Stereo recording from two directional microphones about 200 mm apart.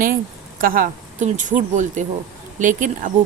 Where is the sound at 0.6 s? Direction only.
45° right (ahead or behind).